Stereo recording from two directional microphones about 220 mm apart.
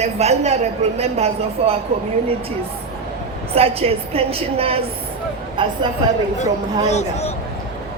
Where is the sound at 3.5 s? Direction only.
25° right (ahead or behind).